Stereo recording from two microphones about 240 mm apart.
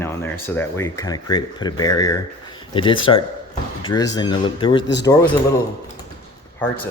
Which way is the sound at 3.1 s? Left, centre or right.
Left.